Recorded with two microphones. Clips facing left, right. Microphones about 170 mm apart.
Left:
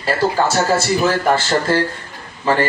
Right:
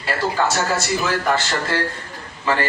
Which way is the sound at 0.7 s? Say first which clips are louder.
Left 5 dB; 30° left (ahead or behind).